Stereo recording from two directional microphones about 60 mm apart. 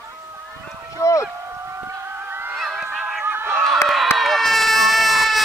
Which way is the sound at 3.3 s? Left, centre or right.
Right.